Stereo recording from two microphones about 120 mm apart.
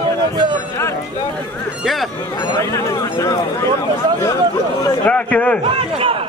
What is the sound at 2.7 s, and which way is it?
Speech, 25° left (ahead or behind).